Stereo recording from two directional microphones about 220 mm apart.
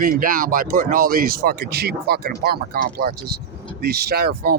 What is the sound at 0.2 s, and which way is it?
Speech, 40° right (ahead or behind).